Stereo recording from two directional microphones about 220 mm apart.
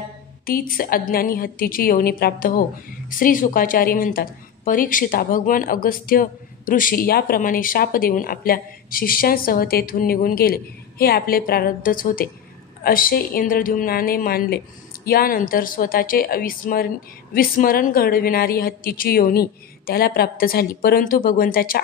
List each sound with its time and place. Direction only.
0.5 s a woman's voice: 40° left (ahead or behind)